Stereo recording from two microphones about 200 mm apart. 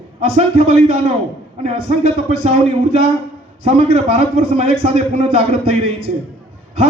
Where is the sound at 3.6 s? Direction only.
30° right (ahead or behind).